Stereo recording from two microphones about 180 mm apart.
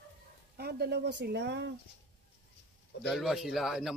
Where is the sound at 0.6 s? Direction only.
60° right (ahead or behind).